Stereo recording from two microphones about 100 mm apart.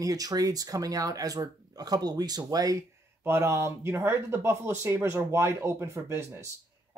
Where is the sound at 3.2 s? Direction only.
25° right (ahead or behind).